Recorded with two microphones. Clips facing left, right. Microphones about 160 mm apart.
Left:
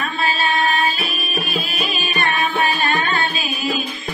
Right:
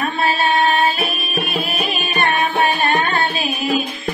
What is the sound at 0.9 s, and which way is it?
Music, 55° right (ahead or behind).